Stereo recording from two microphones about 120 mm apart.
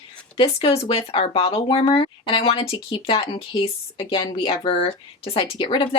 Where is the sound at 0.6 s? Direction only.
55° left (ahead or behind).